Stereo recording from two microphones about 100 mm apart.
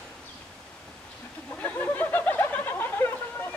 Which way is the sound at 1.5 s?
20° left (ahead or behind).